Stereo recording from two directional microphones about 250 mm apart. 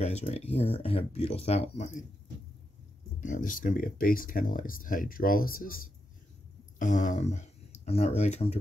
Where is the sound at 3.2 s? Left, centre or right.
Left.